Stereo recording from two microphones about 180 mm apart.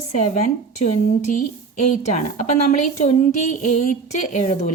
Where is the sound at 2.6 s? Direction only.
40° left (ahead or behind).